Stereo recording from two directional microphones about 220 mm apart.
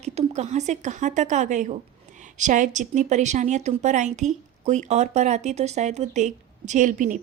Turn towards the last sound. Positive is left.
turn(degrees=-35)  # may be behind; listen again after turning